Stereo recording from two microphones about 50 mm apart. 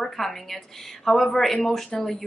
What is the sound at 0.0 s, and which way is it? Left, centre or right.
A woman's voice, centre.